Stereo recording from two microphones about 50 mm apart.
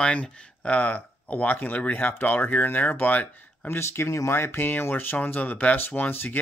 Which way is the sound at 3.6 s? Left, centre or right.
Left.